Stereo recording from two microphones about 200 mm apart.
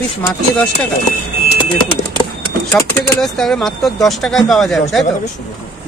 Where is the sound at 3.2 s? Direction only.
Centre (ahead or behind).